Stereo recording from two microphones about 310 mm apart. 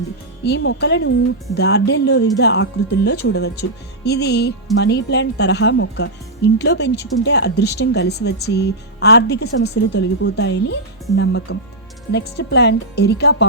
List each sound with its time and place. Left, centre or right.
0.4 s speech: left